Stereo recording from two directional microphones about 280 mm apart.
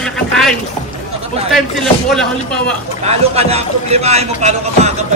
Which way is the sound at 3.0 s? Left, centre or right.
Right.